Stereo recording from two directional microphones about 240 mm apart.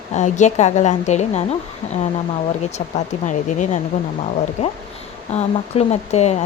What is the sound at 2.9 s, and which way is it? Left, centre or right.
Speech, left.